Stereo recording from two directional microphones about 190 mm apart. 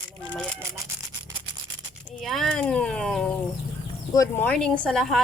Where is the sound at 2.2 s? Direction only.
Centre (ahead or behind).